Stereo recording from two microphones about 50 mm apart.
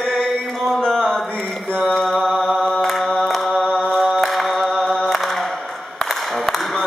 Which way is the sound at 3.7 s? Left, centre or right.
Centre.